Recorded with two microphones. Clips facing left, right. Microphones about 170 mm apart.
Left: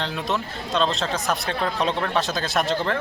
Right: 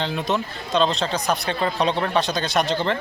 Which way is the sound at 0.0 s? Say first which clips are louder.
Right 3 dB; centre (ahead or behind).